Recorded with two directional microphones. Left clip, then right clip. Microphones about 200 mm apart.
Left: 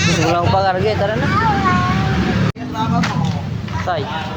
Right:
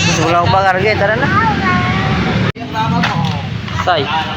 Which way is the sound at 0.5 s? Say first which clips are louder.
Right 4 dB; 10° left (ahead or behind).